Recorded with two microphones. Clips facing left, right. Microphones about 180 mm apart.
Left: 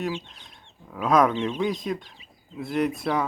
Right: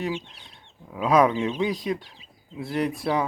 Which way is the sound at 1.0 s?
10° right (ahead or behind).